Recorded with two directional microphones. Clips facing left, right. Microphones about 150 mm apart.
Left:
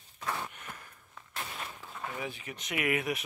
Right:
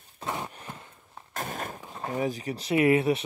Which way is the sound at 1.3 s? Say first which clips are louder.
Right 7 dB; 45° right (ahead or behind).